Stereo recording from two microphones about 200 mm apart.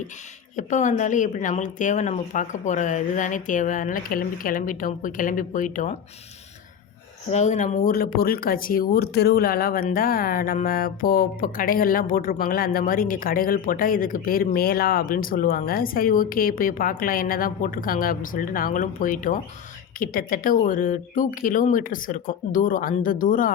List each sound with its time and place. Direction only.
0.5 s a woman's voice: 40° left (ahead or behind)
7.3 s speech: 35° left (ahead or behind)